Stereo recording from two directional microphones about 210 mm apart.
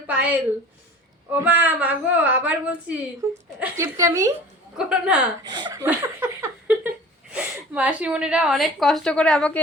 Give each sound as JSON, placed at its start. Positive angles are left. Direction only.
{"t": 0.1, "sound": "a woman's voice", "side_deg": -5}
{"t": 4.7, "sound": "a woman's voice", "side_deg": -5}
{"t": 5.5, "sound": "speech", "side_deg": -20}
{"t": 5.8, "sound": "a woman's voice", "side_deg": -10}